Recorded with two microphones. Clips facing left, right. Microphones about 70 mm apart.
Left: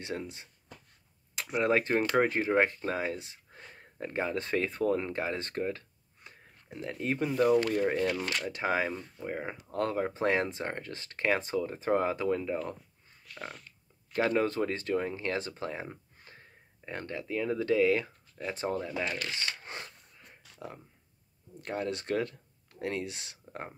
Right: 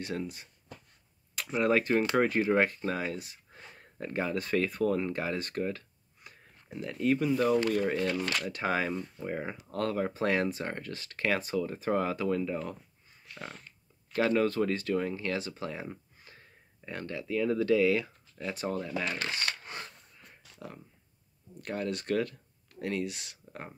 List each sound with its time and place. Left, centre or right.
0.0 s speech: left
14.1 s speech: left
19.1 s speech: right
20.5 s speech: left